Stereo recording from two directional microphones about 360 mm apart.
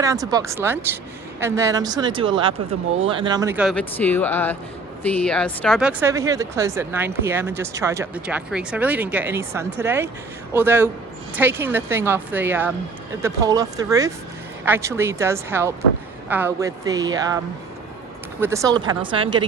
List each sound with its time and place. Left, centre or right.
0.0 s speech: centre